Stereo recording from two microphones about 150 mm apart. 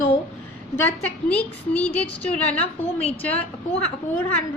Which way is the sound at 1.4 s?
10° left (ahead or behind).